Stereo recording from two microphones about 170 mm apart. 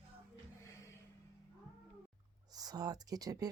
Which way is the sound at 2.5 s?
20° right (ahead or behind).